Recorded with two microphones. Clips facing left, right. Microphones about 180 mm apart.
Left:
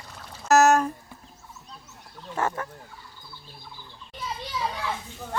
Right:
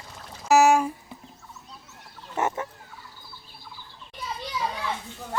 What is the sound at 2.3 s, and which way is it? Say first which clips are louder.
Fowl: right 1 dB; 20° right (ahead or behind).